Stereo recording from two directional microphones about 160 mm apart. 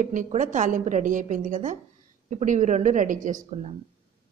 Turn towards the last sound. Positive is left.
turn(degrees=-45)  # may be behind; listen again after turning